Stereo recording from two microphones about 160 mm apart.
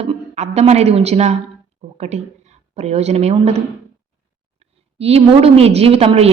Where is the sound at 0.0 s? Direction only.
40° right (ahead or behind).